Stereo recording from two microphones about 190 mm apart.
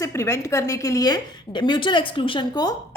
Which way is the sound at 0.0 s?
15° left (ahead or behind).